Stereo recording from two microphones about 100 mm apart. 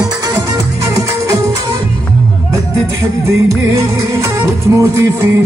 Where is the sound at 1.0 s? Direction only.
35° right (ahead or behind).